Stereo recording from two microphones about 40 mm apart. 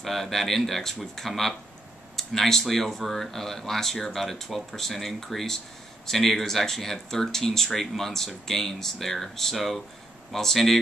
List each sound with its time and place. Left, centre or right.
0.0 s speech: centre